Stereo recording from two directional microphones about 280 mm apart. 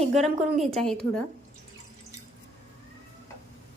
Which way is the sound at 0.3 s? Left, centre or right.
Right.